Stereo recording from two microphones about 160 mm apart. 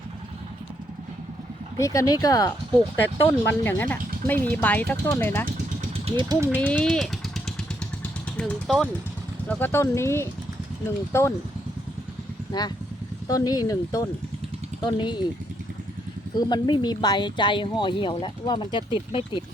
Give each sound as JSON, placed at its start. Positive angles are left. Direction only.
{"t": 1.8, "sound": "speech", "side_deg": 20}
{"t": 3.2, "sound": "speech", "side_deg": 15}
{"t": 6.1, "sound": "speech", "side_deg": -25}
{"t": 6.6, "sound": "speech", "side_deg": 5}
{"t": 12.5, "sound": "speech", "side_deg": 25}
{"t": 16.5, "sound": "speech", "side_deg": 25}